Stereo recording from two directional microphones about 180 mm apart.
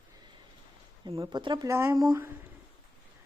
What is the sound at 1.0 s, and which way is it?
Speech, 20° right (ahead or behind).